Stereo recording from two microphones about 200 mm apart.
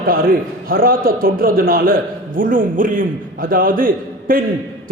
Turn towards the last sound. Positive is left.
turn(degrees=-45)  # may be behind; listen again after turning